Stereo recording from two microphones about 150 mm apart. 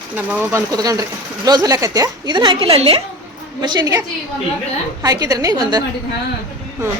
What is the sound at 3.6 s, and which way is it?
Speech, 25° right (ahead or behind).